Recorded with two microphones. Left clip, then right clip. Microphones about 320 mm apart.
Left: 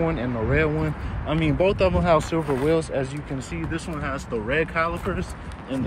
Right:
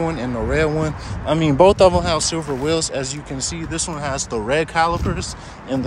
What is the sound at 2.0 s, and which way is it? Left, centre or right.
Speech, centre.